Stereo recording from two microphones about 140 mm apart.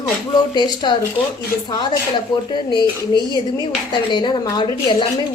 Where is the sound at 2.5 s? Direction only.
35° left (ahead or behind).